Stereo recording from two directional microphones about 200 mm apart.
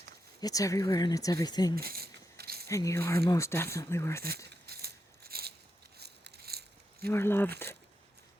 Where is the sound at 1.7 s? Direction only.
50° right (ahead or behind).